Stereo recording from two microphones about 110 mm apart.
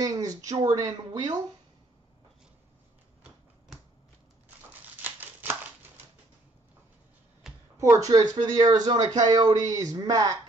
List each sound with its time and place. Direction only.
0.0 s speech: 35° right (ahead or behind)
5.0 s scissors: 20° right (ahead or behind)
7.7 s speech: 30° right (ahead or behind)